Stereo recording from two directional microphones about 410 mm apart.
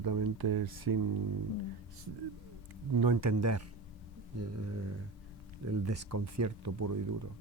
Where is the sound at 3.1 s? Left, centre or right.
Right.